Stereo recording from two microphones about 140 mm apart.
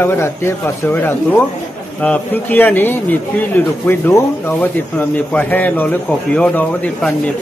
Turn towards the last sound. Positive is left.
turn(degrees=10)  # may be behind; listen again after turning